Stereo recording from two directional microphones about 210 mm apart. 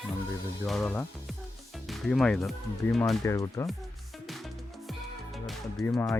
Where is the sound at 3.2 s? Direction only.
15° left (ahead or behind).